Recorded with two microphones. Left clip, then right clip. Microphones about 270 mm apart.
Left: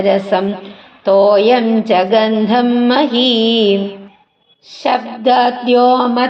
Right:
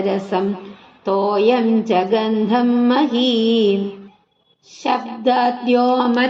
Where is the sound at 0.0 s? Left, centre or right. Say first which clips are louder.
Left 7 dB; centre.